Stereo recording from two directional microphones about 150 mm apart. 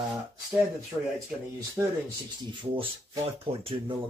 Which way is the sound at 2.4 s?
35° right (ahead or behind).